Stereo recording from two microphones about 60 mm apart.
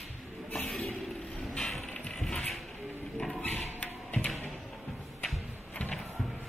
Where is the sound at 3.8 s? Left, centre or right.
Left.